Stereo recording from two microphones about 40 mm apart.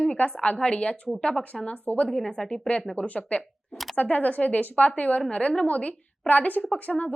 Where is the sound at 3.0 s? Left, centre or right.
Left.